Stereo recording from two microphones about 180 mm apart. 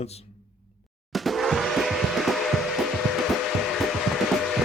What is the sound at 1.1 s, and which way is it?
Music, centre (ahead or behind).